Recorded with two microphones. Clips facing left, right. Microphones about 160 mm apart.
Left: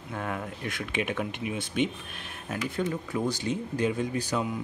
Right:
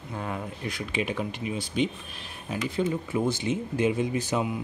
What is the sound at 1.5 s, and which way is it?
Speech, 55° left (ahead or behind).